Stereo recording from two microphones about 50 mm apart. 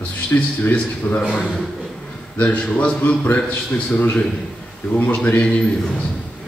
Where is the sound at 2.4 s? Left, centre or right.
Left.